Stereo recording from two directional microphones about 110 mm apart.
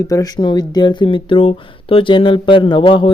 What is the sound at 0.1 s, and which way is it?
Speech, 35° left (ahead or behind).